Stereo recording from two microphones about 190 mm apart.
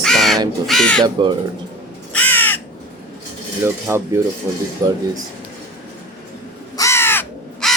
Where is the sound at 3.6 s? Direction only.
15° right (ahead or behind).